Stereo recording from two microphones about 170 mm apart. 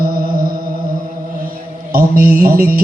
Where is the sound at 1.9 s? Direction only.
55° right (ahead or behind).